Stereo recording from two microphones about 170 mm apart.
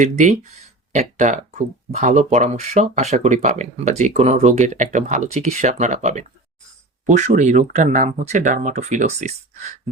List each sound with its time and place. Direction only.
0.0 s speech: 45° right (ahead or behind)